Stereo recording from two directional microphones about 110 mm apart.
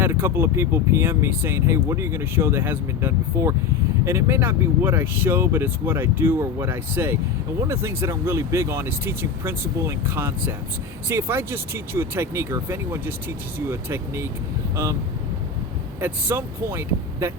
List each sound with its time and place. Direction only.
0.0 s speech: 20° right (ahead or behind)
16.0 s speech: 20° right (ahead or behind)